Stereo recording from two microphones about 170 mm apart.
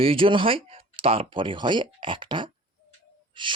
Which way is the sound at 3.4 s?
30° right (ahead or behind).